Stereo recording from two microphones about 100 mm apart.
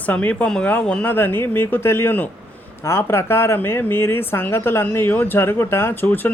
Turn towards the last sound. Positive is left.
turn(degrees=20)  # may be behind; listen again after turning